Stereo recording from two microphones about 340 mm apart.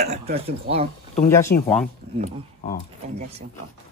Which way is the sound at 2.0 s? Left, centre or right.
Right.